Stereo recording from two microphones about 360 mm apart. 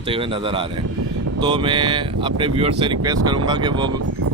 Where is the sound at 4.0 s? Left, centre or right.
Right.